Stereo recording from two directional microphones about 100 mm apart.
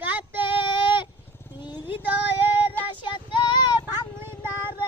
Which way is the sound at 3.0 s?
50° left (ahead or behind).